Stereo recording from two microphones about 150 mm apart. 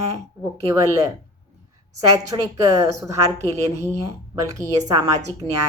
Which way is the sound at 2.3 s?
20° right (ahead or behind).